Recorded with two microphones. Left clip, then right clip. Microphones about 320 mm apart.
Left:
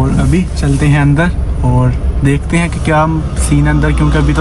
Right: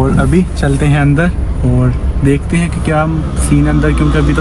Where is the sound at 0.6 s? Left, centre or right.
Centre.